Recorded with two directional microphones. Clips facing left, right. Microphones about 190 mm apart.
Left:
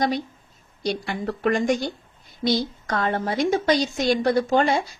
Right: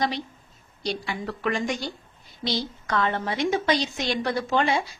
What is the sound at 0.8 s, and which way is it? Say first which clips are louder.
A woman's voice: left 3 dB; 50° left (ahead or behind).